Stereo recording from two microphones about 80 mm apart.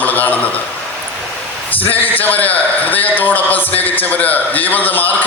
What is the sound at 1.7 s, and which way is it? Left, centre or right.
A man's voice, left.